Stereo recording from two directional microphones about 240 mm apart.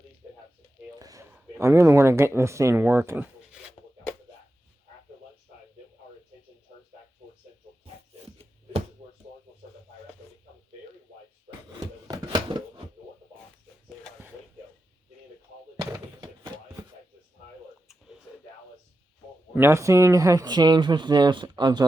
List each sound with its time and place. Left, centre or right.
0.9 s speech: centre
12.0 s a sound: centre
15.8 s slam: centre
19.5 s speech: centre